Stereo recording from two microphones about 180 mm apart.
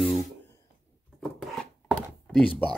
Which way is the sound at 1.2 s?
5° left (ahead or behind).